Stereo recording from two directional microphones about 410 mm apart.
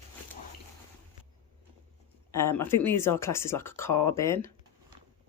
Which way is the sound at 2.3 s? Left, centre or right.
Centre.